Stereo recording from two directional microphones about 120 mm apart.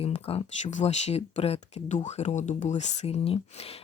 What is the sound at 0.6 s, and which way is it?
Speech, 80° left.